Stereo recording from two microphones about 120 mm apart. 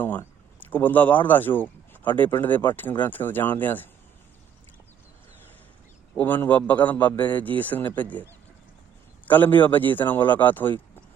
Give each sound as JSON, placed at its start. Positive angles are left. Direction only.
{"t": 0.0, "sound": "a man's voice", "side_deg": 15}
{"t": 6.1, "sound": "a man's voice", "side_deg": 15}
{"t": 9.2, "sound": "a man's voice", "side_deg": 15}